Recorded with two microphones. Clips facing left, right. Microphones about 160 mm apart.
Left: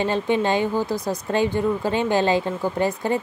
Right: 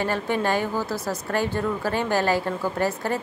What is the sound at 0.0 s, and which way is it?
A woman's voice, 20° left (ahead or behind).